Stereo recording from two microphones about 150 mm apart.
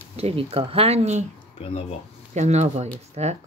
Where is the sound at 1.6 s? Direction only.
40° left (ahead or behind).